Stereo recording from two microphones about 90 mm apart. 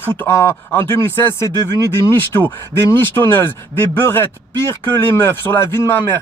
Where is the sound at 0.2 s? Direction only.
25° left (ahead or behind).